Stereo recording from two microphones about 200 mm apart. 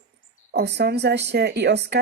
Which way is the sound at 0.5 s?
55° right (ahead or behind).